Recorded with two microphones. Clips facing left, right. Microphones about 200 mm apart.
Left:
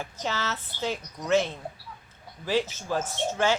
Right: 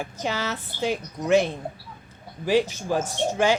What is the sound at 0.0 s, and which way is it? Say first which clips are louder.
Speech: right 3 dB; 15° right (ahead or behind).